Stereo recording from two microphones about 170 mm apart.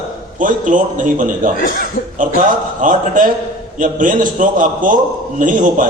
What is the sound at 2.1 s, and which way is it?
A man's voice, 50° right (ahead or behind).